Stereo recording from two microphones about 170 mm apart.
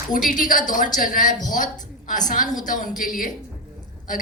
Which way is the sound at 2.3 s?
50° left (ahead or behind).